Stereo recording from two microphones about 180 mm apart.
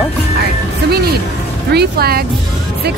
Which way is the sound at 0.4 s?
60° right (ahead or behind).